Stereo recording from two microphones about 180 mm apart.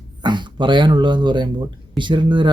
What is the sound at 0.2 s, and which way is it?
Speech, 25° right (ahead or behind).